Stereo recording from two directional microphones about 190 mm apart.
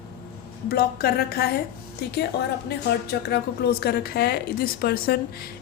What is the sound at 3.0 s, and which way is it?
A woman's voice, 60° left (ahead or behind).